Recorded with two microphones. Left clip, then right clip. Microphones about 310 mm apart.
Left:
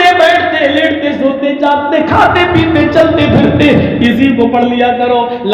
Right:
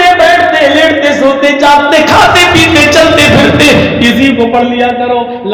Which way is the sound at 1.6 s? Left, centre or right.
Right.